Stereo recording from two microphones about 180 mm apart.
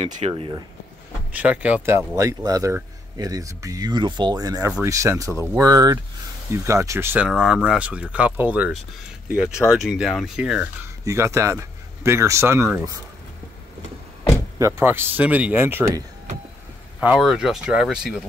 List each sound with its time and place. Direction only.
0.0 s speech: 35° right (ahead or behind)
1.3 s speech: 10° right (ahead or behind)
14.6 s speech: 15° right (ahead or behind)
17.0 s speech: centre (ahead or behind)